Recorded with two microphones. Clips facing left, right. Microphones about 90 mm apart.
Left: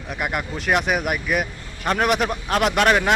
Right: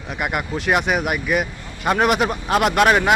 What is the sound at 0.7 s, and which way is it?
Speech, centre (ahead or behind).